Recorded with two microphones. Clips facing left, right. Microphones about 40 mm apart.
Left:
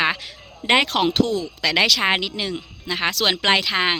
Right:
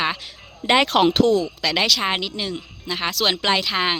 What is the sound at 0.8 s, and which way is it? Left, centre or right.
Speech, centre.